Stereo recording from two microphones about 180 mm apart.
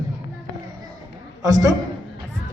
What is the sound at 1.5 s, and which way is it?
Speech, 20° right (ahead or behind).